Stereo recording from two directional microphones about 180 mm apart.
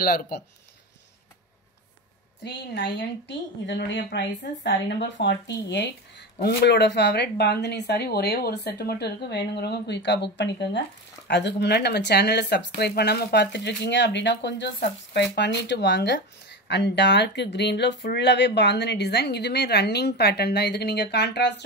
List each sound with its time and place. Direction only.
0.0 s speech: 55° left (ahead or behind)
2.4 s speech: 70° left (ahead or behind)